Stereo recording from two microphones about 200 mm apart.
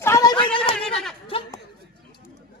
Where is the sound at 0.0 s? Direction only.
15° left (ahead or behind).